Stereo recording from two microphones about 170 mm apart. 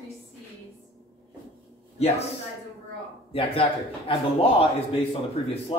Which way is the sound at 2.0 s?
35° left (ahead or behind).